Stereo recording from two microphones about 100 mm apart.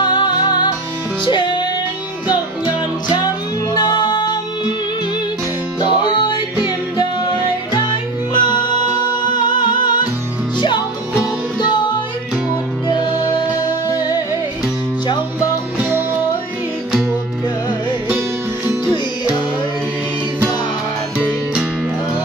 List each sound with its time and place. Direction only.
0.0 s music: 50° left (ahead or behind)
3.7 s music: 60° left (ahead or behind)
5.8 s music: 55° left (ahead or behind)
7.7 s music: 55° left (ahead or behind)
13.7 s music: 40° left (ahead or behind)